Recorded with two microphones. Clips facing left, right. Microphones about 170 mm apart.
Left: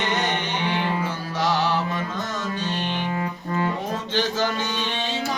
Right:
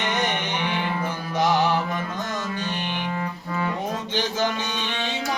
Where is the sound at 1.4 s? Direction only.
15° right (ahead or behind).